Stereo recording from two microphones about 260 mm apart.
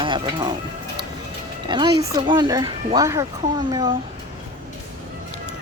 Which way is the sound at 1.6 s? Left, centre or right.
Centre.